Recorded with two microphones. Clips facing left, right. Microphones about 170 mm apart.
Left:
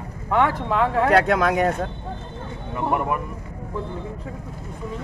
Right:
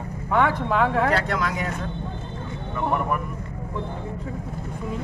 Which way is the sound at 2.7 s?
20° left (ahead or behind).